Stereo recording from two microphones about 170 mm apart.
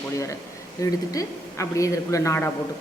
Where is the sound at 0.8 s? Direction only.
20° left (ahead or behind).